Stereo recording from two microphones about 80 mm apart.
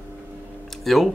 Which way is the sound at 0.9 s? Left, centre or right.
Centre.